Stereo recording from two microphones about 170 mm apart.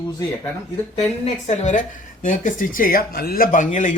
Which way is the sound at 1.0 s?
40° left (ahead or behind).